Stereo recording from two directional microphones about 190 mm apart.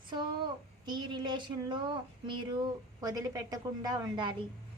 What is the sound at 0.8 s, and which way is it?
A woman's voice, 25° right (ahead or behind).